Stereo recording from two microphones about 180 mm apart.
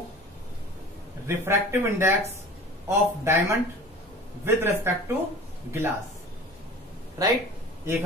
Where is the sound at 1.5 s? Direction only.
15° right (ahead or behind).